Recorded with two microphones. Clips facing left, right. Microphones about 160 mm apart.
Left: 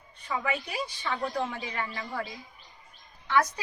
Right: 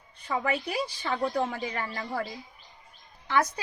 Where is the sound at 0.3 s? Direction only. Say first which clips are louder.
Right 3 dB; 35° right (ahead or behind).